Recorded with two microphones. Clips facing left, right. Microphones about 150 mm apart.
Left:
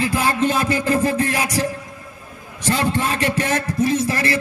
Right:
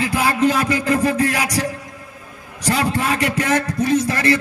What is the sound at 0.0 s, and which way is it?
Music, 30° left (ahead or behind).